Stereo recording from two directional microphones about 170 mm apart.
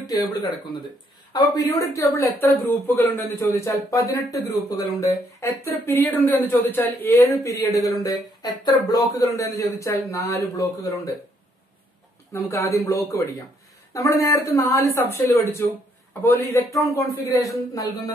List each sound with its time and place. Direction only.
0.0 s a man's voice: 20° left (ahead or behind)
12.3 s a man's voice: 15° left (ahead or behind)